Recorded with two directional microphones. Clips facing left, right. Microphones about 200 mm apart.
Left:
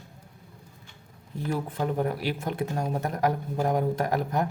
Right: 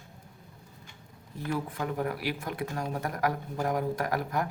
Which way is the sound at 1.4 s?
25° left (ahead or behind).